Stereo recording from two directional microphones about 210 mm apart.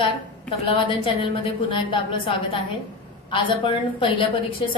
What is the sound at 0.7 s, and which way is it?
A woman's voice, 25° left (ahead or behind).